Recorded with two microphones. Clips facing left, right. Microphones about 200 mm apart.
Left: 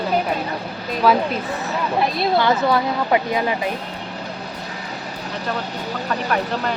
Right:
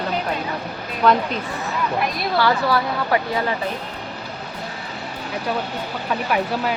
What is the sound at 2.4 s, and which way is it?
Speech, 20° left (ahead or behind).